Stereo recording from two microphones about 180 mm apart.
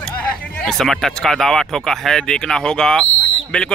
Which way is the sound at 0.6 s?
Centre (ahead or behind).